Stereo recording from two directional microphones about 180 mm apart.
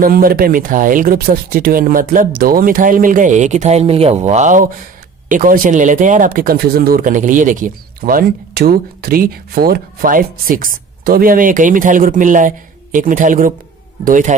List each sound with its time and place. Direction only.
0.0 s speech: 55° right (ahead or behind)